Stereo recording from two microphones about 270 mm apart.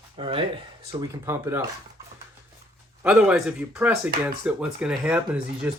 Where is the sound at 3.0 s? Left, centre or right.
Centre.